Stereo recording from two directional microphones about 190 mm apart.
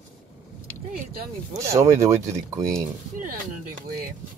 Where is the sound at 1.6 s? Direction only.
15° right (ahead or behind).